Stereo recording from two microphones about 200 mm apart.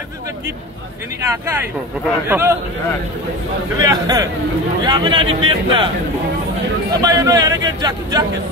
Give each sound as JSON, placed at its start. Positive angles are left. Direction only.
{"t": 2.2, "sound": "a man's voice", "side_deg": -10}
{"t": 3.8, "sound": "a man's voice", "side_deg": -20}
{"t": 6.9, "sound": "a man's voice", "side_deg": -20}